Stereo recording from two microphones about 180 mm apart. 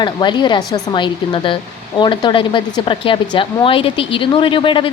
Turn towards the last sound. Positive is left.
turn(degrees=30)  # may be behind; listen again after turning